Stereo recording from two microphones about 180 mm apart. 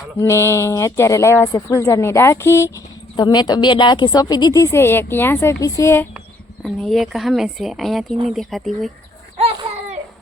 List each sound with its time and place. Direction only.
0.2 s speech: 15° left (ahead or behind)
6.1 s speech: centre (ahead or behind)
9.4 s baby cry: 30° right (ahead or behind)